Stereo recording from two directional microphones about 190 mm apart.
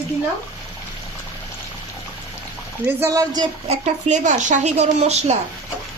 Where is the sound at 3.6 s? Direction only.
40° right (ahead or behind).